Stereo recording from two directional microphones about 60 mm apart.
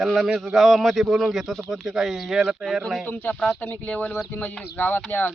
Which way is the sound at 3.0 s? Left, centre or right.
Left.